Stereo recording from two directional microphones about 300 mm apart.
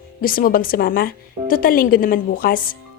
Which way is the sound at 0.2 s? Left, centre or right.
Left.